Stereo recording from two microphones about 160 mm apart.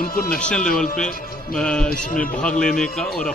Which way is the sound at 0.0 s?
65° left (ahead or behind).